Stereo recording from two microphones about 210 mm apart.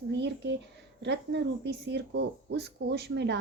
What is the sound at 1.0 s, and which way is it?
A woman's voice, 55° right (ahead or behind).